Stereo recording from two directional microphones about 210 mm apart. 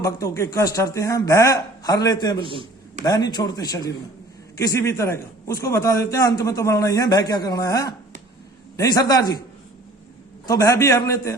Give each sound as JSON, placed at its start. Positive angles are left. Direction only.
{"t": 0.0, "sound": "speech", "side_deg": 15}
{"t": 2.4, "sound": "a sound", "side_deg": -25}
{"t": 3.0, "sound": "a man's voice", "side_deg": 20}
{"t": 10.4, "sound": "speech", "side_deg": 15}